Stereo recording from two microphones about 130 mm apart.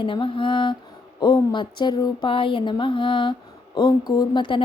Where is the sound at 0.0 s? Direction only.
40° left (ahead or behind).